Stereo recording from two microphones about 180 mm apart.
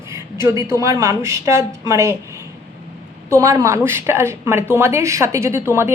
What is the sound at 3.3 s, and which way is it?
A woman's voice, 20° right (ahead or behind).